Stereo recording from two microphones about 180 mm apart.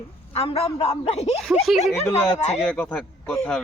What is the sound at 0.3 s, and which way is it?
A man's voice, 35° left (ahead or behind).